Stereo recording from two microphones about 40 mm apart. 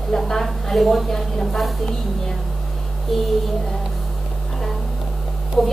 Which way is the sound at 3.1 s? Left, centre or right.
Centre.